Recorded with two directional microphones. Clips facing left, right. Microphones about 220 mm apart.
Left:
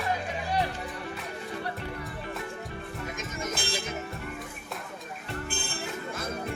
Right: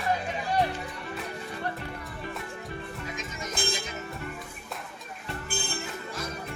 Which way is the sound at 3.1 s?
50° left (ahead or behind).